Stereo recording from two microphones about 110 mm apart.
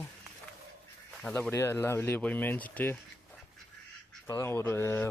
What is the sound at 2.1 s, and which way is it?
Speech, 10° left (ahead or behind).